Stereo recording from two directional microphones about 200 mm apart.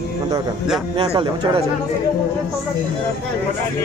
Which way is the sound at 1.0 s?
25° right (ahead or behind).